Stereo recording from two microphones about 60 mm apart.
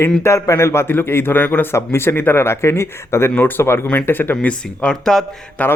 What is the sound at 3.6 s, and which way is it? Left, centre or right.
Speech, left.